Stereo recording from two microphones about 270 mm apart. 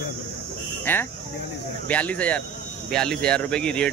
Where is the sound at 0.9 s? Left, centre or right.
Centre.